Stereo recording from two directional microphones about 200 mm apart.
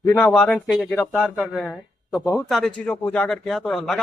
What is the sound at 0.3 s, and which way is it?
A man's voice, centre (ahead or behind).